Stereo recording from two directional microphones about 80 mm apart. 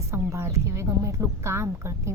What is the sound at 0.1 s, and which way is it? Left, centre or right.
A woman's voice, right.